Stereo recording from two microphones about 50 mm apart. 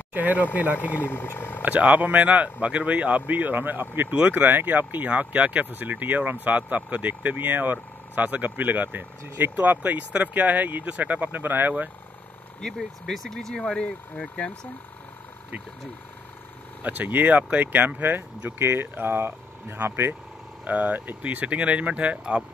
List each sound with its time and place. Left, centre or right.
0.1 s speech: right
0.7 s speech: left
1.6 s speech: right
12.6 s speech: centre
16.8 s speech: right
20.6 s speech: right